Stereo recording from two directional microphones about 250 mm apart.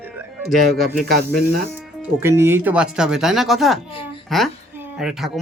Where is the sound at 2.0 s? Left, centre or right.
Centre.